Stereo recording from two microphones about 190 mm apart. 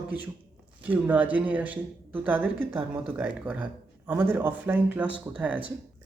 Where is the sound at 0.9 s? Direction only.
10° right (ahead or behind).